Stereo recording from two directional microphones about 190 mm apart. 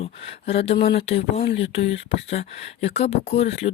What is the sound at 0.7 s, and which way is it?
Speech, 50° left (ahead or behind).